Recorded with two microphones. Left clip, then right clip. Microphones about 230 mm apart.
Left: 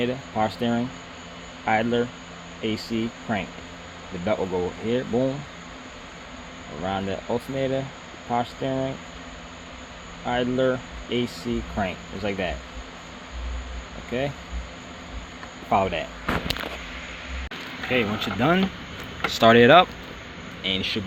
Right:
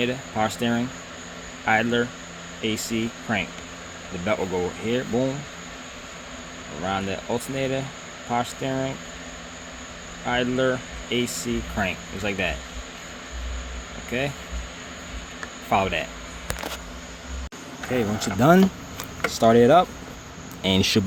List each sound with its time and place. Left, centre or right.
0.0 s speech: centre
6.8 s speech: centre
10.2 s speech: centre
14.1 s speech: centre
15.7 s speech: centre
17.9 s speech: right
19.3 s speech: centre
20.7 s speech: right